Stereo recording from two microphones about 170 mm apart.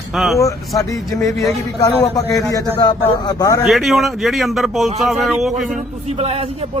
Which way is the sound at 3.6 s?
Centre (ahead or behind).